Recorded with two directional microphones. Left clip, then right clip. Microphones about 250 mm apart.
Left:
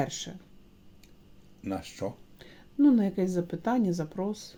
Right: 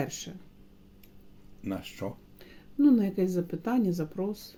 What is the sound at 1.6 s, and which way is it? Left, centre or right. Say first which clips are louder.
Speech: left 2 dB; centre.